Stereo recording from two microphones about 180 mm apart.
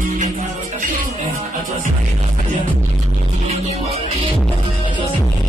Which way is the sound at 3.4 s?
35° right (ahead or behind).